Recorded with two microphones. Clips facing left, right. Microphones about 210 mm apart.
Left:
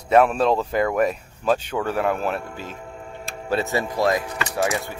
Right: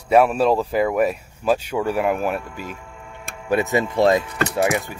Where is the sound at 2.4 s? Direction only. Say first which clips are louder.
Right 1 dB; 40° left (ahead or behind).